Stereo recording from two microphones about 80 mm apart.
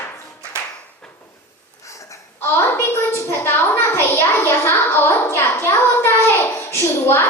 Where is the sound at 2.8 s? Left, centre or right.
Left.